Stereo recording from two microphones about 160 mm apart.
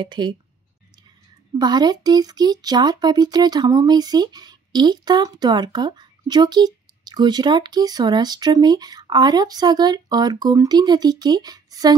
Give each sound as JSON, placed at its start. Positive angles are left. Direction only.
{"t": 0.0, "sound": "speech", "side_deg": -30}
{"t": 1.6, "sound": "speech", "side_deg": -25}